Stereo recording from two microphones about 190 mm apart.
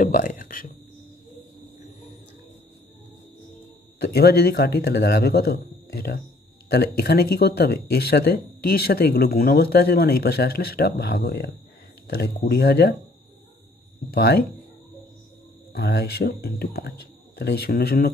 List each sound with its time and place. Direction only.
0.0 s a sound: 45° left (ahead or behind)
4.0 s speech: 55° left (ahead or behind)
14.1 s speech: 55° left (ahead or behind)
15.7 s speech: 55° left (ahead or behind)